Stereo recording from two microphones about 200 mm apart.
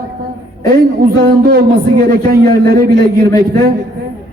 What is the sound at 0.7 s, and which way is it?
Speech, 50° right (ahead or behind).